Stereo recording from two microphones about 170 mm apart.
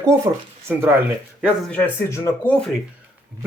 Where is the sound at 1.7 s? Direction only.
10° left (ahead or behind).